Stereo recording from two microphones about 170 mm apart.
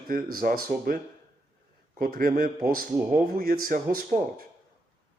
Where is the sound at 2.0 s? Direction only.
60° right (ahead or behind).